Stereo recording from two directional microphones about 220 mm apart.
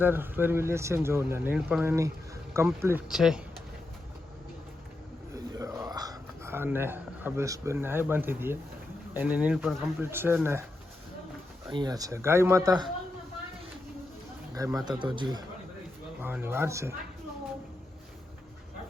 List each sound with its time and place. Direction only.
0.0 s speech: 10° right (ahead or behind)
5.3 s a sound: 15° right (ahead or behind)
9.1 s speech: 5° right (ahead or behind)
11.7 s speech: 20° right (ahead or behind)
14.8 s speech: 20° right (ahead or behind)